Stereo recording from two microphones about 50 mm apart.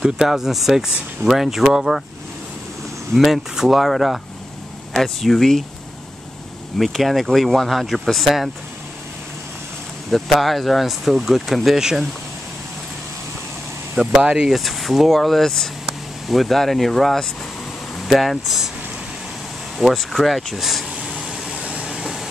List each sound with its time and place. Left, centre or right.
0.0 s speech: centre
3.2 s speech: centre
6.8 s speech: centre
10.1 s speech: centre
13.9 s speech: centre
14.5 s speech: centre
18.0 s speech: centre
19.8 s speech: centre
21.2 s vehicle: centre
21.5 s vehicle: right
21.8 s vehicle: centre